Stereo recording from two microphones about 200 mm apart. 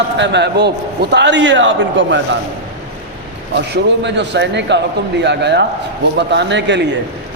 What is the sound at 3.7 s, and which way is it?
A man's voice, 60° right (ahead or behind).